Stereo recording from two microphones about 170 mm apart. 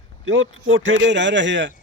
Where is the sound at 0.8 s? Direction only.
90° right.